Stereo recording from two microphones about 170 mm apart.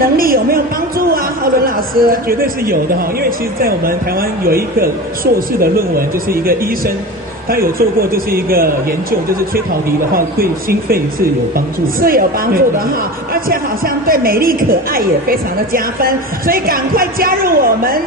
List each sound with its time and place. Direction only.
0.0 s a woman's voice: 60° right (ahead or behind)